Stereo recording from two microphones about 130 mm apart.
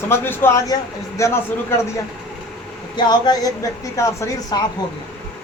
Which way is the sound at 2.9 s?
35° left (ahead or behind).